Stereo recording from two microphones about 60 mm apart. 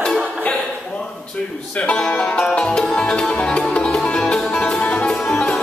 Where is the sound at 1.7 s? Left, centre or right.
Left.